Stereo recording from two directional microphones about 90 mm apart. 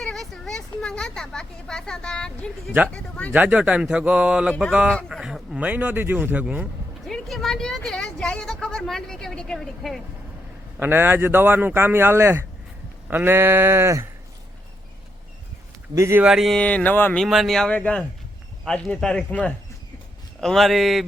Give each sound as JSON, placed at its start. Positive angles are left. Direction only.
{"t": 0.0, "sound": "speech", "side_deg": 5}
{"t": 3.3, "sound": "a man's voice", "side_deg": -20}
{"t": 5.0, "sound": "a man's voice", "side_deg": 0}
{"t": 7.0, "sound": "a sound", "side_deg": 0}
{"t": 10.8, "sound": "a man's voice", "side_deg": -25}
{"t": 16.0, "sound": "speech", "side_deg": -30}
{"t": 16.2, "sound": "speech", "side_deg": 0}
{"t": 16.6, "sound": "speech", "side_deg": 15}
{"t": 17.2, "sound": "speech", "side_deg": 0}
{"t": 20.4, "sound": "speech", "side_deg": 5}